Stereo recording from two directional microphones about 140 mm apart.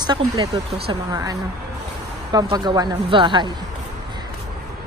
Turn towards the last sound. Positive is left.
turn(degrees=-35)  # may be behind; listen again after turning